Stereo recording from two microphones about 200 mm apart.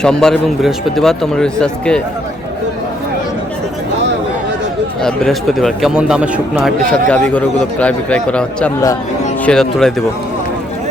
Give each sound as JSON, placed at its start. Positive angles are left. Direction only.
{"t": 0.0, "sound": "speech", "side_deg": 5}
{"t": 5.0, "sound": "speech", "side_deg": 0}